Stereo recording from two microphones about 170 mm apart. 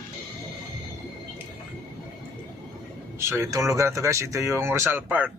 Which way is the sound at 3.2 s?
15° right (ahead or behind).